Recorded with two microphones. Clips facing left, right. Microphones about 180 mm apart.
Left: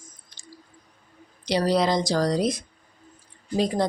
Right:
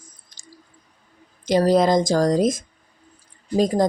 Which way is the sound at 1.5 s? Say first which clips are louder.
Right 5 dB; 45° right (ahead or behind).